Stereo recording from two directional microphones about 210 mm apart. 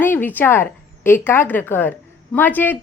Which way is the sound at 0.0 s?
10° left (ahead or behind).